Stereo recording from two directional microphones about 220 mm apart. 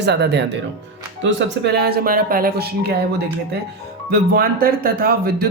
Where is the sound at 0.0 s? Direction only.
50° right (ahead or behind).